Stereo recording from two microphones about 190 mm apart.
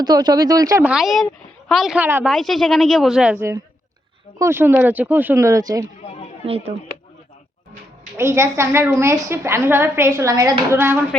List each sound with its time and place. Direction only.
0.0 s speech: 20° right (ahead or behind)
0.9 s a woman's voice: centre (ahead or behind)
2.3 s a woman's voice: centre (ahead or behind)
4.4 s a woman's voice: 15° right (ahead or behind)
6.4 s speech: 30° right (ahead or behind)
8.2 s a woman's voice: 15° right (ahead or behind)